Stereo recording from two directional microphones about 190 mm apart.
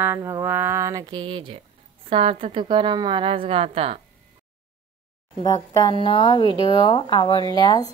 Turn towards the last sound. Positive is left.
turn(degrees=20)  # may be behind; listen again after turning